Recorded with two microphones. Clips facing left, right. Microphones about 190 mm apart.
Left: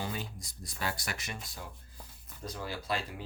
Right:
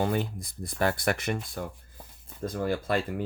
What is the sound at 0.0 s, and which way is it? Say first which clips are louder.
Speech: right 11 dB; 55° right (ahead or behind).